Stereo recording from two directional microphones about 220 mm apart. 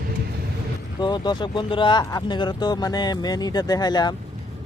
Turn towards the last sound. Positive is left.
turn(degrees=20)  # may be behind; listen again after turning